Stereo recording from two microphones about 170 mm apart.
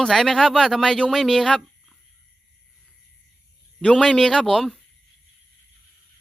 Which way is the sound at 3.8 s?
5° left (ahead or behind).